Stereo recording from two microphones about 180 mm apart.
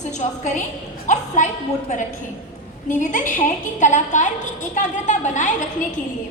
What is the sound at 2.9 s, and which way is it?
A woman's voice, 45° left (ahead or behind).